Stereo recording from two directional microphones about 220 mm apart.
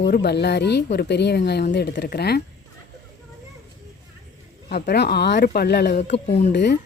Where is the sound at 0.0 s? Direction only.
50° left (ahead or behind).